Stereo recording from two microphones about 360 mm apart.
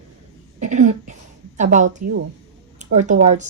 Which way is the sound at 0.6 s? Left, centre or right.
Centre.